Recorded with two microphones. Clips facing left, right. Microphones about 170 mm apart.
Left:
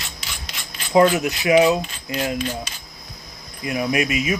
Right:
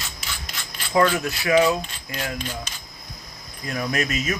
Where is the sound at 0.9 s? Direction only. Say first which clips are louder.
Left 4 dB; 20° left (ahead or behind).